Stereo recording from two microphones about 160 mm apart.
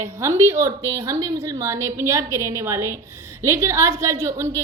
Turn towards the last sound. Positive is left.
turn(degrees=-15)  # may be behind; listen again after turning